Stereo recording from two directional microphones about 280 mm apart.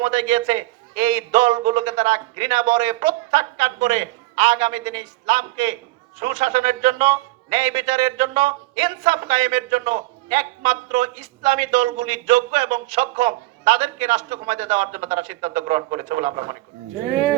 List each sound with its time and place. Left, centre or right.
0.0 s a man's voice: right